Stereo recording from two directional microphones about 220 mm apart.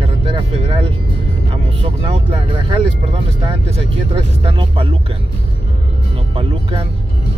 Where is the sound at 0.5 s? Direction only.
30° right (ahead or behind).